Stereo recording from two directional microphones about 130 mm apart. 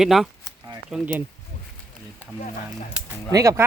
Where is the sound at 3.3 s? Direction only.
25° right (ahead or behind).